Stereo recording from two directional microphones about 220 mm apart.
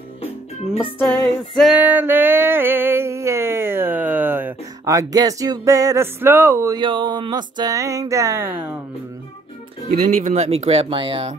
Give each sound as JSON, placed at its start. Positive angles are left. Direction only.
{"t": 0.9, "sound": "music", "side_deg": 10}
{"t": 1.6, "sound": "music", "side_deg": -5}
{"t": 9.8, "sound": "speech", "side_deg": -35}